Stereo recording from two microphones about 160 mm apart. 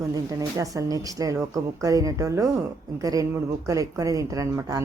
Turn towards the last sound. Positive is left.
turn(degrees=-20)  # may be behind; listen again after turning